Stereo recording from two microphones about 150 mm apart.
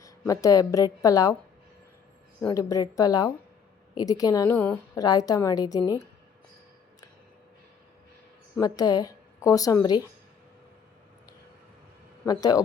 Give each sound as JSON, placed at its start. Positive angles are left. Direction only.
{"t": 0.0, "sound": "a woman's voice", "side_deg": 25}
{"t": 2.5, "sound": "a woman's voice", "side_deg": 20}
{"t": 4.5, "sound": "a woman's voice", "side_deg": 15}
{"t": 4.9, "sound": "a woman's voice", "side_deg": 25}
{"t": 8.6, "sound": "a woman's voice", "side_deg": 25}
{"t": 12.2, "sound": "a woman's voice", "side_deg": 25}